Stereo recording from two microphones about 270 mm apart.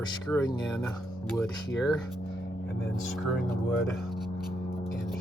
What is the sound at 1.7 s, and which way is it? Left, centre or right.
Speech, centre.